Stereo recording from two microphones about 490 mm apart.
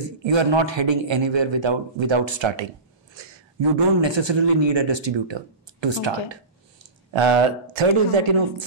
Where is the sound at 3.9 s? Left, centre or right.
Right.